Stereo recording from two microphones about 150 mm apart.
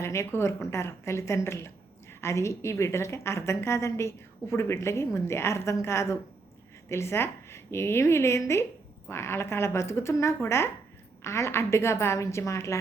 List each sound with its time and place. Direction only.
0.0 s a woman's voice: 20° left (ahead or behind)